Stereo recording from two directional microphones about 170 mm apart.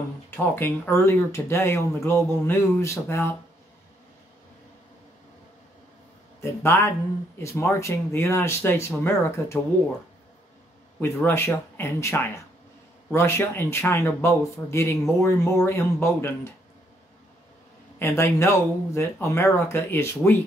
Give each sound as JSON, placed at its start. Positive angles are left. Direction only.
{"t": 0.6, "sound": "speech", "side_deg": 15}
{"t": 6.4, "sound": "speech", "side_deg": 15}
{"t": 11.0, "sound": "speech", "side_deg": 15}
{"t": 17.9, "sound": "speech", "side_deg": 15}